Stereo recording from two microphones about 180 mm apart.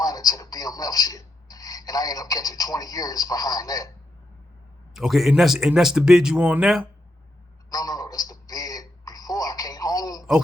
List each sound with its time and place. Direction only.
0.0 s a man's voice: 20° left (ahead or behind)
4.9 s speech: centre (ahead or behind)
7.7 s a sound: 20° left (ahead or behind)